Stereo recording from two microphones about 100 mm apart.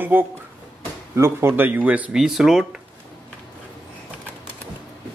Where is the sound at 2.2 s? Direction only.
5° right (ahead or behind).